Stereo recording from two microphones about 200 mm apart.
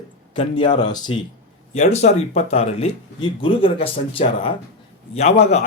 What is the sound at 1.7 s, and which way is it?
A man's voice, 35° left (ahead or behind).